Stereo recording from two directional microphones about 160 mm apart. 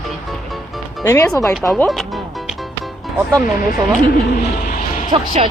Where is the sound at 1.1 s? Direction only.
20° left (ahead or behind).